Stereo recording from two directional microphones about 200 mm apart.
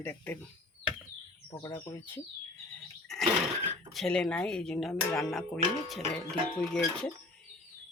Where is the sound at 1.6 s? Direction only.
15° left (ahead or behind).